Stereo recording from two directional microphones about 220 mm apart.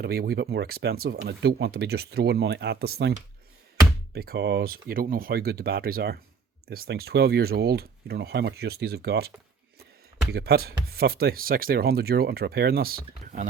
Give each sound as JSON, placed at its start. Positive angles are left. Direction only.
{"t": 0.0, "sound": "speech", "side_deg": -45}
{"t": 10.3, "sound": "speech", "side_deg": -45}